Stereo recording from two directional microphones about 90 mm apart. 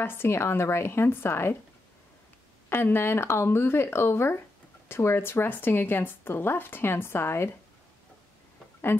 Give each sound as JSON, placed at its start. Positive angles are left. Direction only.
{"t": 0.0, "sound": "speech", "side_deg": 25}
{"t": 2.7, "sound": "speech", "side_deg": 25}